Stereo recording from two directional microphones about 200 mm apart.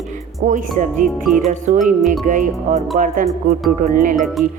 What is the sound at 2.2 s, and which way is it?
Speech, 40° right (ahead or behind).